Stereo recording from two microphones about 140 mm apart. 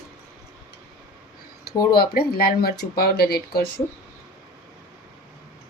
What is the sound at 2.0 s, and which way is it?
Speech, 90° left.